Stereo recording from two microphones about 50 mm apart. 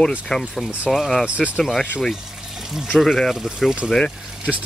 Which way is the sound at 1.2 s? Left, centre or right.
Right.